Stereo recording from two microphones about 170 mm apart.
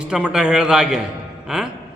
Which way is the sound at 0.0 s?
5° right (ahead or behind).